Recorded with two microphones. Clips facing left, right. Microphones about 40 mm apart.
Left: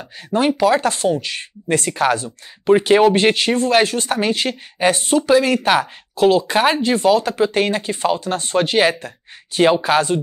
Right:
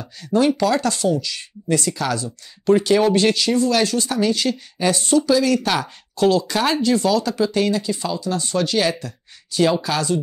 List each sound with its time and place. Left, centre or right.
0.3 s speech: left